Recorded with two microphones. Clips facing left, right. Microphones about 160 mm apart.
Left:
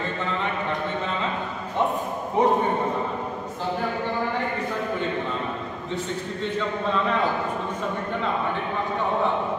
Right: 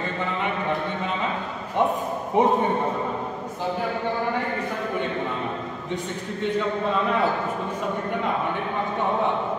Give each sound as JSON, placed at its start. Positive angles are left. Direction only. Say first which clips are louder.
{"t": 2.4, "sound": "a man's voice", "louder": "right 1 dB", "side_deg": -20}